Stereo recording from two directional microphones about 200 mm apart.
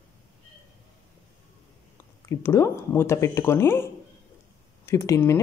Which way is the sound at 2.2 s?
15° left (ahead or behind).